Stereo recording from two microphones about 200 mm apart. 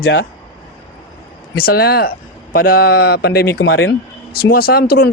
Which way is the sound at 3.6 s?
75° left (ahead or behind).